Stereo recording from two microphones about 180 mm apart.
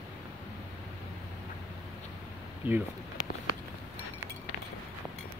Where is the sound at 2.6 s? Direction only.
10° right (ahead or behind).